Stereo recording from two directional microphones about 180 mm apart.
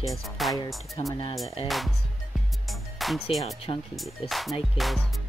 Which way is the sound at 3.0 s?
Centre (ahead or behind).